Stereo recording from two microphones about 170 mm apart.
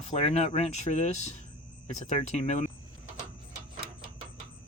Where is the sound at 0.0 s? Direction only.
40° left (ahead or behind).